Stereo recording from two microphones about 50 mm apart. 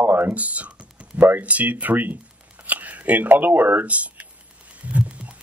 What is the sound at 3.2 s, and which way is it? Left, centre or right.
Speech, right.